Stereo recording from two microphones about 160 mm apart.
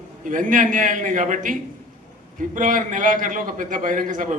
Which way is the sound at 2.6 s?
55° right (ahead or behind).